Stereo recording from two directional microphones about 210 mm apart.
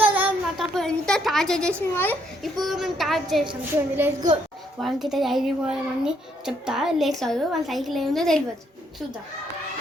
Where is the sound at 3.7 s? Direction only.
10° right (ahead or behind).